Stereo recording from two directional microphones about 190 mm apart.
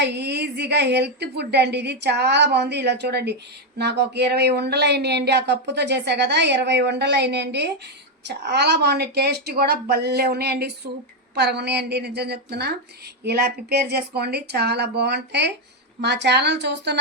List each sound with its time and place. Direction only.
0.0 s speech: 65° right (ahead or behind)